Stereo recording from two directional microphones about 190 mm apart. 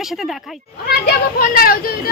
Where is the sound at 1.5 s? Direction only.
50° left (ahead or behind).